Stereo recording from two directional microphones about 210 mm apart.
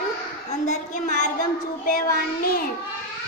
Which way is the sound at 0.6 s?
35° left (ahead or behind).